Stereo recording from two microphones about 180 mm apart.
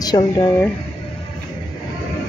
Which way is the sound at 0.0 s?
20° left (ahead or behind).